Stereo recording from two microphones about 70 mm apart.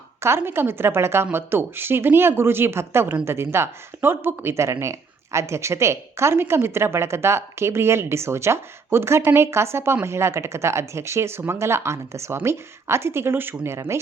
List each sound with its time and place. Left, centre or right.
0.2 s speech: right